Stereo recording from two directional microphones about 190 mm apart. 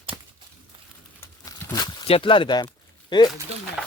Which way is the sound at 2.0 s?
30° left (ahead or behind).